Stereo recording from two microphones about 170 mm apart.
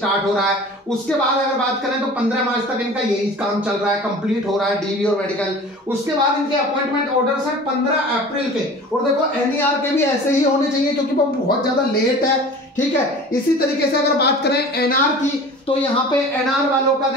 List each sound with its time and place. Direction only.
14.1 s speech: 75° left (ahead or behind)